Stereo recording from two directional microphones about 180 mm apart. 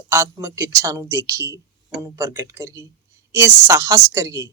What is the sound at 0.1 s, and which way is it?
A woman's voice, 15° right (ahead or behind).